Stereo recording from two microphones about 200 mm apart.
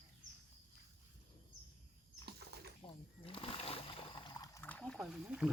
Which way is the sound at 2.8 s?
25° left (ahead or behind).